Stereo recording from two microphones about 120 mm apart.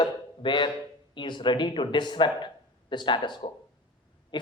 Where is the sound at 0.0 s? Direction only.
40° left (ahead or behind).